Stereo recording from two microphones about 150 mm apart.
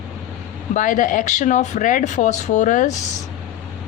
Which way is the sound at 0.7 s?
60° left (ahead or behind).